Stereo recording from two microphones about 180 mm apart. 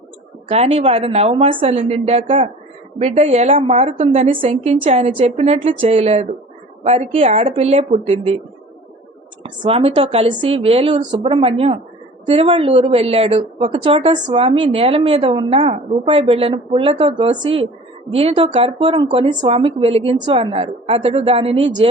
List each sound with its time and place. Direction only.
0.5 s a woman's voice: 35° right (ahead or behind)
9.4 s a woman's voice: 30° right (ahead or behind)